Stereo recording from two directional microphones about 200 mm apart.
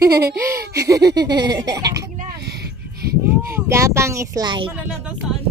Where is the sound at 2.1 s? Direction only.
55° right (ahead or behind).